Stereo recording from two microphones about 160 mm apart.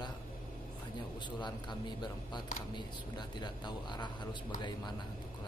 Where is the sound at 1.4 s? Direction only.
30° left (ahead or behind).